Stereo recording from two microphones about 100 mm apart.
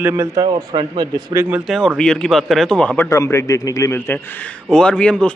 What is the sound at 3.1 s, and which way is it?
Speech, 30° left (ahead or behind).